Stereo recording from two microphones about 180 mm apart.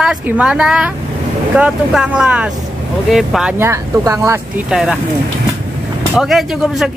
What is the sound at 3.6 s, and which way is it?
Speech, 15° right (ahead or behind).